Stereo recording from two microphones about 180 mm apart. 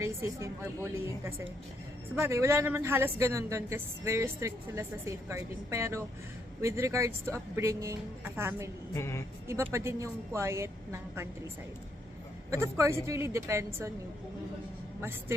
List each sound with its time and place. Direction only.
0.0 s a woman's voice: 15° right (ahead or behind)
8.9 s a woman's voice: 15° left (ahead or behind)
9.5 s a woman's voice: 15° right (ahead or behind)
12.5 s a woman's voice: 15° right (ahead or behind)